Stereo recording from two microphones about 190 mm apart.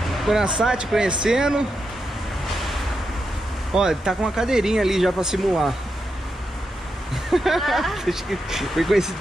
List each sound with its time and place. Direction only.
0.2 s speech: 5° right (ahead or behind)
3.7 s speech: 5° right (ahead or behind)
7.2 s speech: centre (ahead or behind)